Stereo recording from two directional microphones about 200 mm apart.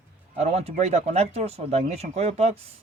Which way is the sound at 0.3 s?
35° right (ahead or behind).